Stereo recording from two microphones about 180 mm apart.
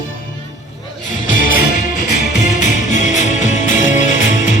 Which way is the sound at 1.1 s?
45° left (ahead or behind).